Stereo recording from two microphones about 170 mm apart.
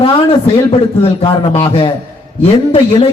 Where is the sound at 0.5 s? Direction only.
35° left (ahead or behind).